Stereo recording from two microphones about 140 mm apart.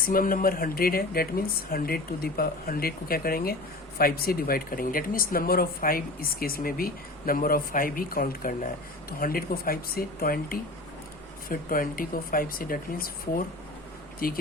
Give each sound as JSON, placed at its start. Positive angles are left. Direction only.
{"t": 0.0, "sound": "speech", "side_deg": 90}